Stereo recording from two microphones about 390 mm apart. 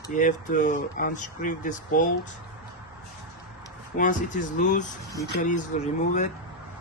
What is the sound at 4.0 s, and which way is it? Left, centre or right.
Speech, centre.